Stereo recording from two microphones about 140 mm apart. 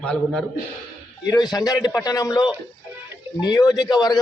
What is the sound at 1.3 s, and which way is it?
A man's voice, 30° left (ahead or behind).